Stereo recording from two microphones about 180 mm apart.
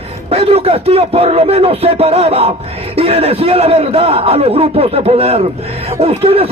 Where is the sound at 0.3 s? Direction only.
35° right (ahead or behind).